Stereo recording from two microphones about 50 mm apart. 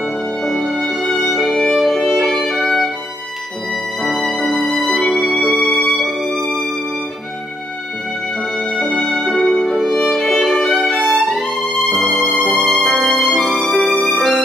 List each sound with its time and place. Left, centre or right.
0.4 s music: centre
0.8 s violin: centre
4.3 s music: centre
8.5 s music: centre
12.6 s music: centre